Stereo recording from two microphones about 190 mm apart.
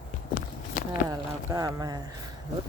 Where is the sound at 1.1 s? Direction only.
20° right (ahead or behind).